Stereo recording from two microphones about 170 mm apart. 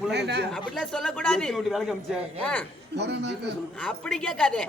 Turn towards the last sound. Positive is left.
turn(degrees=5)  # may be behind; listen again after turning